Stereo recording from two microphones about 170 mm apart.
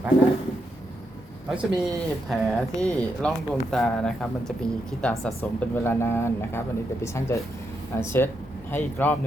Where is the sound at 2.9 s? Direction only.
5° left (ahead or behind).